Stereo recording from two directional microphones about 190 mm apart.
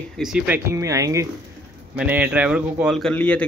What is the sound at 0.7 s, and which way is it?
A man's voice, 15° right (ahead or behind).